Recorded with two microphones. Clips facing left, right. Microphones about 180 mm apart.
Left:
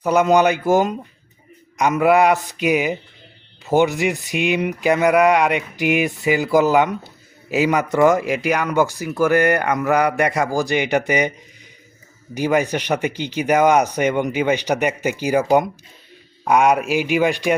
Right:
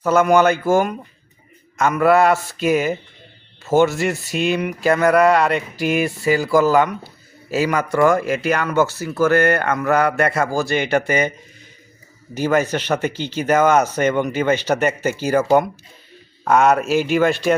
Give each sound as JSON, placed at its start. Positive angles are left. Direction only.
{"t": 0.0, "sound": "speech", "side_deg": 15}